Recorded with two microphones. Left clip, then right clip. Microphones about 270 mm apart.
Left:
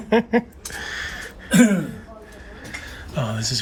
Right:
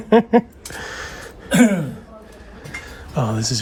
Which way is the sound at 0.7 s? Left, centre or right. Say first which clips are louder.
Left 1 dB; right.